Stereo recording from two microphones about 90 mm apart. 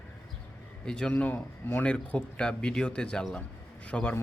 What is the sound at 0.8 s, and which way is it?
Speech, 10° left (ahead or behind).